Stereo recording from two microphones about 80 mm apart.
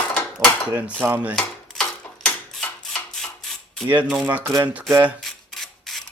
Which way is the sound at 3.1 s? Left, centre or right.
Centre.